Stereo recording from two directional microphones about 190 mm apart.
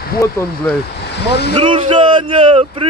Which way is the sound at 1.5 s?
30° right (ahead or behind).